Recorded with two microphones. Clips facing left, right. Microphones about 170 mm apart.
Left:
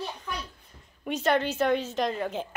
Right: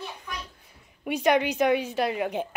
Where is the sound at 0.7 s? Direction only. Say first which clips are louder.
Right 3 dB; 10° right (ahead or behind).